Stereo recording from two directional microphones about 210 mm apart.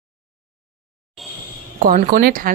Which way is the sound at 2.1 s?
45° right (ahead or behind).